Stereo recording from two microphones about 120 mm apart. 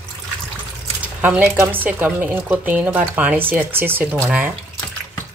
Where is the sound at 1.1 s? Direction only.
15° right (ahead or behind).